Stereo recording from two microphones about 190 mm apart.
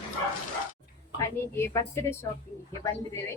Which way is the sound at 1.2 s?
15° left (ahead or behind).